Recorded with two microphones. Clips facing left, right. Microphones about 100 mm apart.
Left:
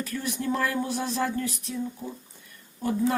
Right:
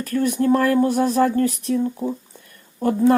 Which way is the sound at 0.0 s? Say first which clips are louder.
Right 11 dB; 50° right (ahead or behind).